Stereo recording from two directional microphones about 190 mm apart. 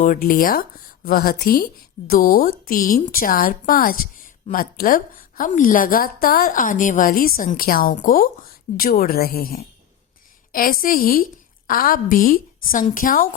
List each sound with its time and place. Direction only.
0.0 s speech: 45° left (ahead or behind)